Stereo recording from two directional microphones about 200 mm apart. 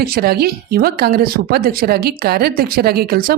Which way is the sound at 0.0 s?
50° right (ahead or behind).